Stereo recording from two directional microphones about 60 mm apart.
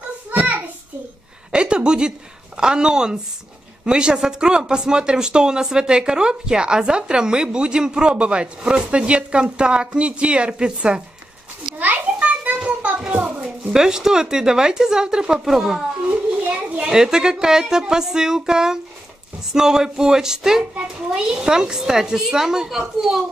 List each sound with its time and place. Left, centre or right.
0.3 s a sound: right
1.5 s a woman's voice: centre
11.8 s children playing: right
13.1 s a sound: right
13.7 s speech: centre
16.4 s speech: centre